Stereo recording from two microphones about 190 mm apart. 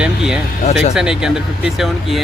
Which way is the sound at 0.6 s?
35° left (ahead or behind).